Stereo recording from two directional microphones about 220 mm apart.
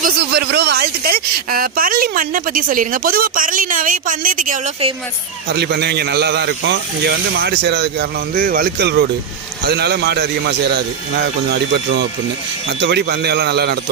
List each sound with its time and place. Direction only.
0.0 s speech: 50° right (ahead or behind)
5.5 s speech: 45° right (ahead or behind)
12.8 s speech: 50° right (ahead or behind)